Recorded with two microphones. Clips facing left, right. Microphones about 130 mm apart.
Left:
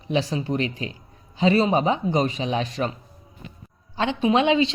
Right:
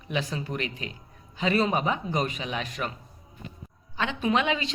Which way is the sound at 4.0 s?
30° left (ahead or behind).